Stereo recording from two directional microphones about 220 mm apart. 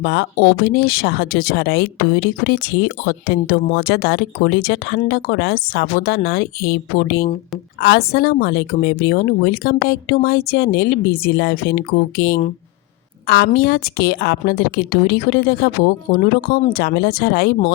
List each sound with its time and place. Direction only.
0.0 s speech: 50° left (ahead or behind)